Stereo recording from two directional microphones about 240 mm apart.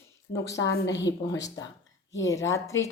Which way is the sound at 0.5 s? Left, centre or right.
Left.